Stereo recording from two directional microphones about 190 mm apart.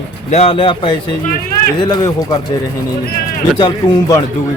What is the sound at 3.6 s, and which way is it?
Speech, 25° left (ahead or behind).